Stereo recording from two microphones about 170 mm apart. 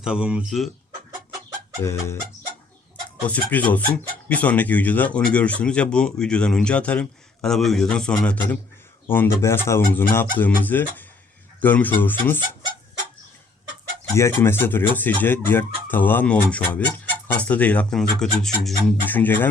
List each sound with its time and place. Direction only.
0.0 s speech: 5° right (ahead or behind)
1.8 s speech: 15° left (ahead or behind)
3.2 s speech: 10° left (ahead or behind)
14.2 s speech: 15° left (ahead or behind)